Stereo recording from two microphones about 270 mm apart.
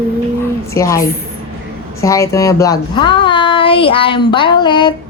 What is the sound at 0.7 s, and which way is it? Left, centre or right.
A woman's voice, centre.